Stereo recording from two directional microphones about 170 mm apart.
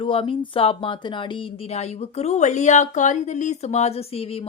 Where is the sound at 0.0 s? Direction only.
30° left (ahead or behind).